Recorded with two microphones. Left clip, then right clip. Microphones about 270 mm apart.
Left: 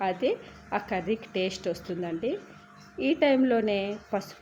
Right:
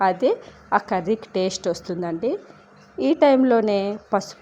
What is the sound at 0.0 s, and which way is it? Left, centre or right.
A woman's voice, centre.